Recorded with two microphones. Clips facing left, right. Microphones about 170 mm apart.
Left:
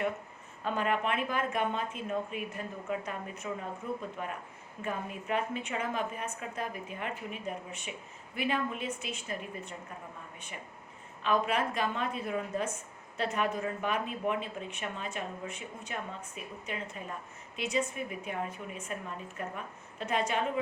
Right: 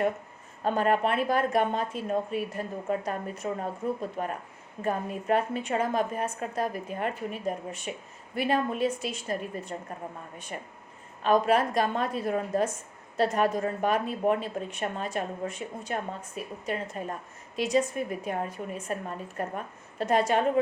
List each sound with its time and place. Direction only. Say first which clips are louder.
0.6 s speech: right 6 dB; 40° right (ahead or behind)
11.2 s speech: right 6 dB; 40° right (ahead or behind)